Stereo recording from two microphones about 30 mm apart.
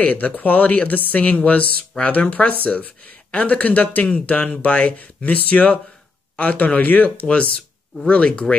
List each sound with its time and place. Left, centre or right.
0.0 s speech: left
3.3 s speech: left
4.3 s speech: left
8.1 s speech: left